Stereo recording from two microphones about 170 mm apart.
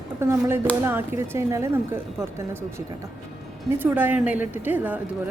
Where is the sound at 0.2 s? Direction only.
15° right (ahead or behind).